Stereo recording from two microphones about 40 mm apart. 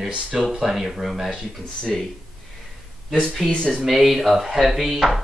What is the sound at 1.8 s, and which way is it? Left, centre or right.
Speech, centre.